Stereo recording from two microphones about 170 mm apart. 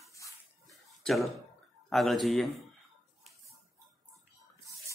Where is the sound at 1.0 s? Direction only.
Centre (ahead or behind).